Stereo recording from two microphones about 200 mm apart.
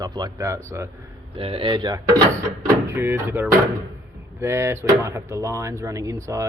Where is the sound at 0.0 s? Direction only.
20° right (ahead or behind).